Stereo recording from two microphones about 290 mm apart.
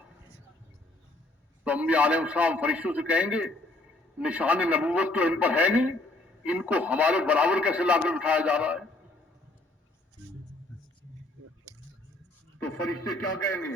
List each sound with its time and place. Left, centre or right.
1.6 s speech: centre
12.9 s a man's voice: left